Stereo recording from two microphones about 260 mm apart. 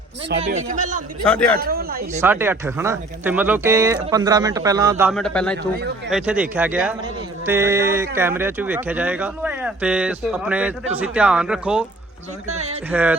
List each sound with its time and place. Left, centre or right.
0.4 s a man's voice: right
1.2 s speech: centre
1.5 s speech: right
2.2 s speech: centre
5.1 s speech: centre
12.5 s speech: right
12.9 s speech: centre